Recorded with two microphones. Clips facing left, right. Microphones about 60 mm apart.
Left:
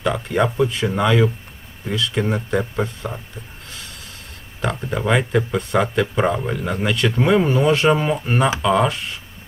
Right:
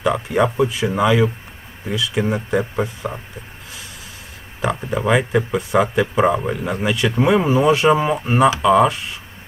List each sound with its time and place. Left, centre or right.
0.0 s speech: centre
4.6 s speech: centre